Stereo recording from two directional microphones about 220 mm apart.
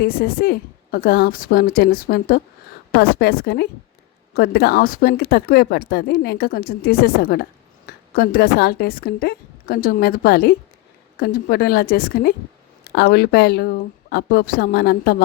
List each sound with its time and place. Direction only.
0.0 s speech: 45° left (ahead or behind)